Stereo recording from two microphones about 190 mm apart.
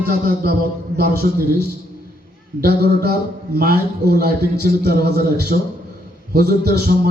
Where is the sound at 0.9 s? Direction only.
55° right (ahead or behind).